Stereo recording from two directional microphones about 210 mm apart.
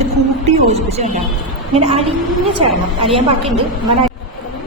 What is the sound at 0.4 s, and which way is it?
A woman's voice, 30° right (ahead or behind).